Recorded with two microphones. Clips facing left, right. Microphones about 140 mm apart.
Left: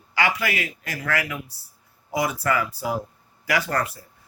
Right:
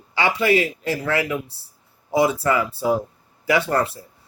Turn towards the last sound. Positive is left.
turn(degrees=-30)  # may be behind; listen again after turning